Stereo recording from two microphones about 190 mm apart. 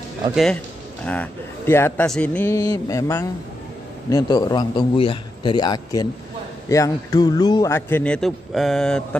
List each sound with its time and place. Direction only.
1.0 s a man's voice: 5° left (ahead or behind)